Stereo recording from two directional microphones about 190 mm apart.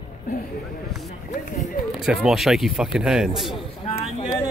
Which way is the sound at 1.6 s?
Centre (ahead or behind).